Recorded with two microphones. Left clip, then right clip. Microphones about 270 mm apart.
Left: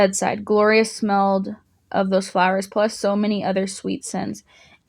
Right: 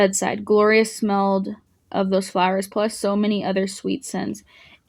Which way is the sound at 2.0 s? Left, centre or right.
Left.